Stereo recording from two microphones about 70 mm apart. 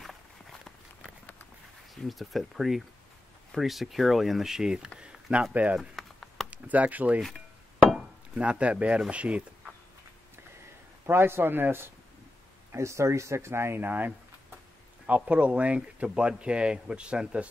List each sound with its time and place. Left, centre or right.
0.0 s walk: centre
2.0 s speech: centre
5.8 s a sound: centre
6.5 s speech: right
8.4 s speech: centre
11.1 s speech: right
12.7 s speech: right; by 17.5 s centre